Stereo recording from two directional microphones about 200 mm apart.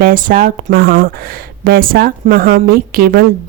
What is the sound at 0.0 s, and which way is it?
Speech, 45° right (ahead or behind).